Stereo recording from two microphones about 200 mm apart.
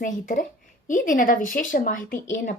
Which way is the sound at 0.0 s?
40° left (ahead or behind).